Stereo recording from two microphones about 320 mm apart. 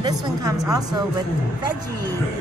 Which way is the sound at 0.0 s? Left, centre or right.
Centre.